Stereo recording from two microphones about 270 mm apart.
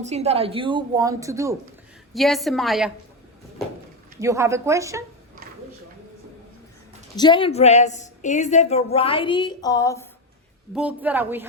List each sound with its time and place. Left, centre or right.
0.0 s a woman's voice: right
2.1 s a woman's voice: centre
4.2 s a woman's voice: centre
7.2 s a woman's voice: centre
10.8 s a woman's voice: centre